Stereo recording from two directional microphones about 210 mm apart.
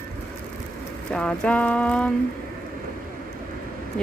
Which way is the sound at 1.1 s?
5° left (ahead or behind).